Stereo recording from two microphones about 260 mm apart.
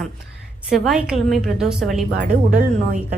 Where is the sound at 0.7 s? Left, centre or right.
Centre.